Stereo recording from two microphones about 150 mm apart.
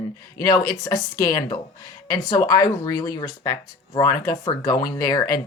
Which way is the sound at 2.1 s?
25° left (ahead or behind).